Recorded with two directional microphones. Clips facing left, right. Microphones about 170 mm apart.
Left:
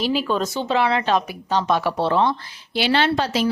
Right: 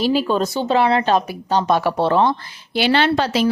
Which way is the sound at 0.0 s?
35° right (ahead or behind).